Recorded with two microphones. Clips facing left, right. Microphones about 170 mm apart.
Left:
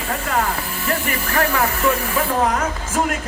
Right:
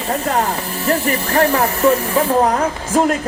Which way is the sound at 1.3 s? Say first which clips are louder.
Right 4 dB; 35° right (ahead or behind).